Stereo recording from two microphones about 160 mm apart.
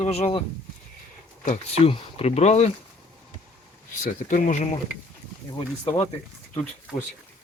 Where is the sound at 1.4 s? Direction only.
50° left (ahead or behind).